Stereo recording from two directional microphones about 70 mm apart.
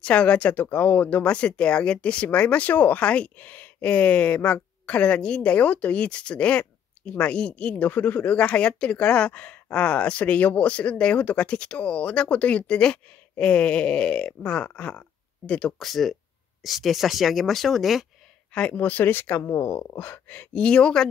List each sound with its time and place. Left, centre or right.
0.0 s speech: centre
15.8 s speech: centre
18.5 s speech: centre